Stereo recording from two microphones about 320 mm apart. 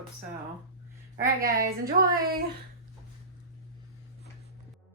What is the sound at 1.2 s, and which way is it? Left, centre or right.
A woman's voice, right.